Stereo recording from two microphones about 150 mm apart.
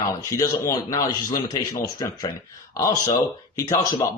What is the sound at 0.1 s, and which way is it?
A man's voice, 20° left (ahead or behind).